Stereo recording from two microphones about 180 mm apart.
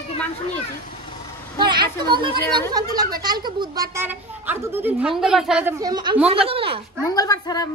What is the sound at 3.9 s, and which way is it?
A woman's voice, 10° right (ahead or behind).